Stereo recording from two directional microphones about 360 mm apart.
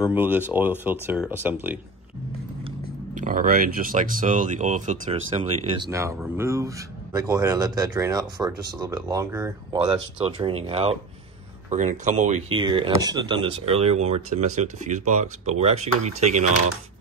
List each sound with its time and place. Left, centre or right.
0.0 s speech: centre
3.2 s speech: right
5.9 s speech: centre